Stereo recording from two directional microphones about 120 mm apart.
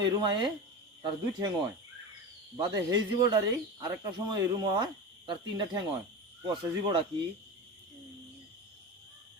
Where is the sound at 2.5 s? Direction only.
35° right (ahead or behind).